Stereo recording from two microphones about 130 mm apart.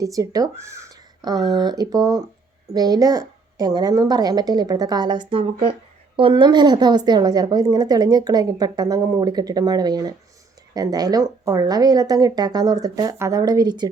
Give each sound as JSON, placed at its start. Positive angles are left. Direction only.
{"t": 0.0, "sound": "a woman's voice", "side_deg": -25}